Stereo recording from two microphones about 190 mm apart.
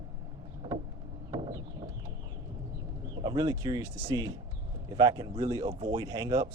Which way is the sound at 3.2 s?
25° right (ahead or behind).